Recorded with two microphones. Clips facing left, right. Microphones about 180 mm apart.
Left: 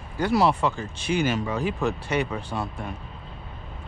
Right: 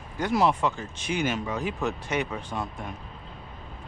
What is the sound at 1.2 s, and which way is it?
Speech, 10° left (ahead or behind).